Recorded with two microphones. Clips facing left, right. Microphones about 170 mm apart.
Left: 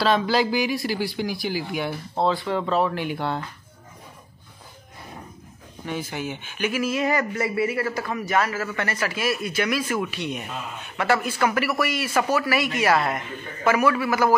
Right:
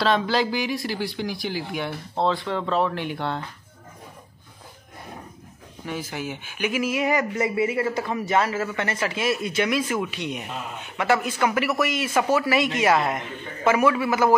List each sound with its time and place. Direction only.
0.0 s speech: 5° left (ahead or behind)
5.9 s speech: centre (ahead or behind); by 14.3 s 20° right (ahead or behind)